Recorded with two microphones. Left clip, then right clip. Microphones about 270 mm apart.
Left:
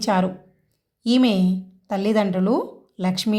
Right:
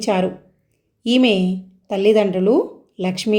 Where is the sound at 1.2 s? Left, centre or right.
Centre.